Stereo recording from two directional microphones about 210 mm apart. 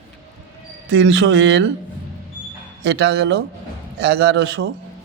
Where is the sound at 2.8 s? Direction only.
55° right (ahead or behind).